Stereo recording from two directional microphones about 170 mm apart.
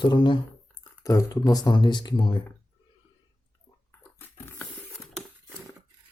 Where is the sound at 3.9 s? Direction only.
10° left (ahead or behind).